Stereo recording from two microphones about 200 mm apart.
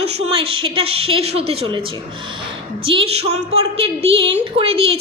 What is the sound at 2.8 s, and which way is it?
A woman's voice, 25° right (ahead or behind).